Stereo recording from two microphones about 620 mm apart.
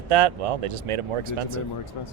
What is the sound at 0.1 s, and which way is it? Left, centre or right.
Speech, right.